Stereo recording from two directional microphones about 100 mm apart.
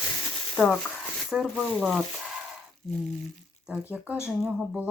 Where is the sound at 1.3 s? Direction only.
5° right (ahead or behind).